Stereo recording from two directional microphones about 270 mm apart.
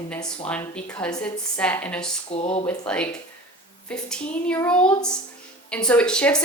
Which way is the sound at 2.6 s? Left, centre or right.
Centre.